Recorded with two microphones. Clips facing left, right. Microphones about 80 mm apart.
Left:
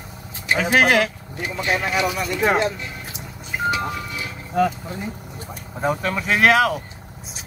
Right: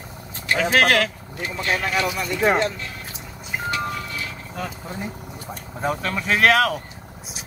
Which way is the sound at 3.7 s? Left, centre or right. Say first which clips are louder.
Left 2 dB; centre.